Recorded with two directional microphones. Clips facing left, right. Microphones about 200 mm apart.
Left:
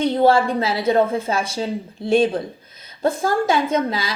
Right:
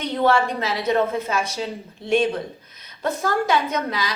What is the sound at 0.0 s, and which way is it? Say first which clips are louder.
A woman's voice: left 4 dB; 30° left (ahead or behind).